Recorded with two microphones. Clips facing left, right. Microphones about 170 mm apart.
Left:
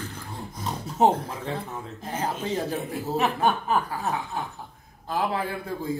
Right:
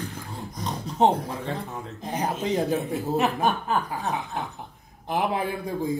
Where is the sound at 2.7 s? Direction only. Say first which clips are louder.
Right 2 dB; centre (ahead or behind).